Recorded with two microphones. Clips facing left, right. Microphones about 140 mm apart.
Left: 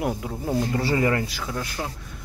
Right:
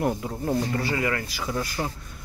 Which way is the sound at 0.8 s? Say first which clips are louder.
Left 4 dB; 30° left (ahead or behind).